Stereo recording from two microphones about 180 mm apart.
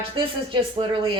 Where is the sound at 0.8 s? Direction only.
30° right (ahead or behind).